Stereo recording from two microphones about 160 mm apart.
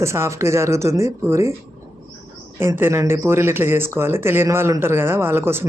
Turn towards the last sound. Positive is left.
turn(degrees=-15)  # may be behind; listen again after turning